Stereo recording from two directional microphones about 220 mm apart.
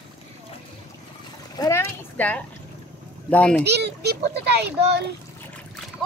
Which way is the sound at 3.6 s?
50° right (ahead or behind).